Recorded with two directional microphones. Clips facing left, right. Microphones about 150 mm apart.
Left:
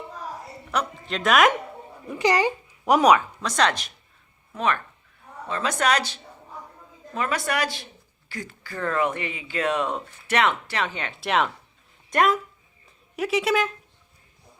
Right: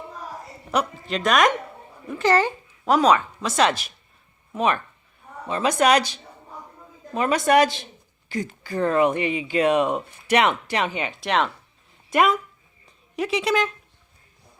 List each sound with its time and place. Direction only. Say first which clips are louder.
1.0 s speech: left 1 dB; centre (ahead or behind)
2.0 s speech: right 2 dB; 15° left (ahead or behind)
3.2 s speech: right 2 dB; 5° right (ahead or behind)
4.5 s speech: right 3 dB; 15° right (ahead or behind)
11.2 s speech: even; 5° left (ahead or behind)